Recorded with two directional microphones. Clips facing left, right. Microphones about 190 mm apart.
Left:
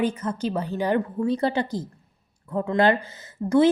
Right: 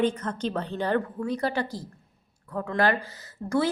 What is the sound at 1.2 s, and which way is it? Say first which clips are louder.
A woman's voice: left 4 dB; 25° left (ahead or behind).